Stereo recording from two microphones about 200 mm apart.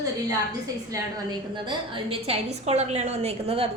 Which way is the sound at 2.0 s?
30° right (ahead or behind).